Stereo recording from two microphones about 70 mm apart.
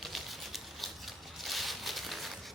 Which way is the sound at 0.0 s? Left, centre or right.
Centre.